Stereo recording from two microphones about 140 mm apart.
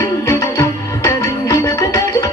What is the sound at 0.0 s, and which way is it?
Music, 20° left (ahead or behind).